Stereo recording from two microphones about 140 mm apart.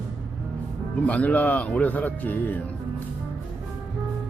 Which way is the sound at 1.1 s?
10° left (ahead or behind).